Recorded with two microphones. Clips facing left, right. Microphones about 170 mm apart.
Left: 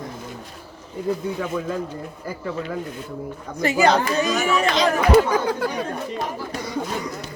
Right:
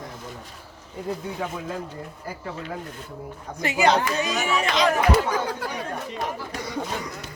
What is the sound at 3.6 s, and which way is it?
Speech, 40° left (ahead or behind).